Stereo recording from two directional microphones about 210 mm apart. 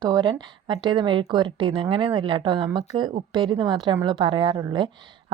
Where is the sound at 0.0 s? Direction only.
20° right (ahead or behind).